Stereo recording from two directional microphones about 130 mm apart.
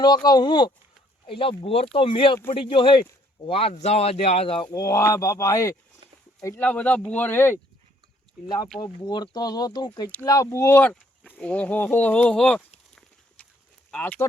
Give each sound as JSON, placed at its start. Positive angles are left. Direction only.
{"t": 0.0, "sound": "speech", "side_deg": 30}
{"t": 4.7, "sound": "speech", "side_deg": 25}
{"t": 6.6, "sound": "speech", "side_deg": 10}
{"t": 8.4, "sound": "speech", "side_deg": 35}
{"t": 13.0, "sound": "horse", "side_deg": 5}
{"t": 13.9, "sound": "speech", "side_deg": 10}